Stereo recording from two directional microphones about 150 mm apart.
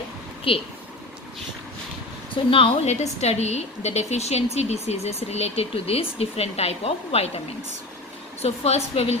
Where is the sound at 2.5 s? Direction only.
40° left (ahead or behind).